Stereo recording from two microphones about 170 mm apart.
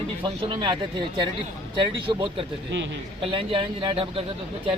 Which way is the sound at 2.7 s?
90° right.